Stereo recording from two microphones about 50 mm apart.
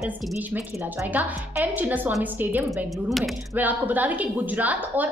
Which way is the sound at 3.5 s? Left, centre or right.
Right.